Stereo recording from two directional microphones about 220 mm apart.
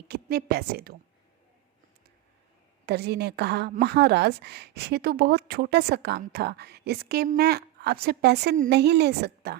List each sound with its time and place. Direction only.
0.1 s a woman's voice: 45° right (ahead or behind)
2.8 s a woman's voice: 45° right (ahead or behind)